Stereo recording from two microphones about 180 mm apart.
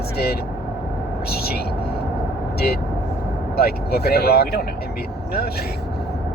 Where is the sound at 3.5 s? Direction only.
60° left (ahead or behind).